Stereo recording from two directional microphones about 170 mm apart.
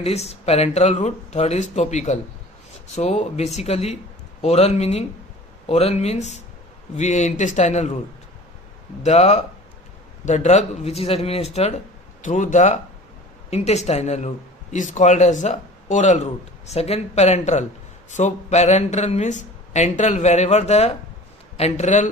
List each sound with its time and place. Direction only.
0.0 s speech: 40° left (ahead or behind)
9.0 s speech: 40° left (ahead or behind)